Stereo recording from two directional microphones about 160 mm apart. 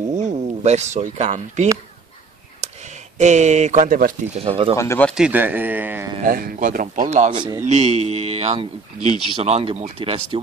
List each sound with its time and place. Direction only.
0.1 s speech: 50° right (ahead or behind)
2.6 s a sound: 40° right (ahead or behind)
3.2 s speech: 45° right (ahead or behind)
4.3 s speech: 35° right (ahead or behind)
4.7 s speech: 15° left (ahead or behind)
5.1 s speech: 10° right (ahead or behind)
6.2 s speech: 65° right (ahead or behind); by 10.4 s 35° right (ahead or behind)